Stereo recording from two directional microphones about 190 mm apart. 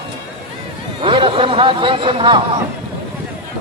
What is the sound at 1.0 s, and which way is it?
Speech, 25° right (ahead or behind).